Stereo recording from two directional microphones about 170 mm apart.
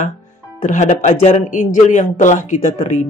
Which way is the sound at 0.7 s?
45° left (ahead or behind).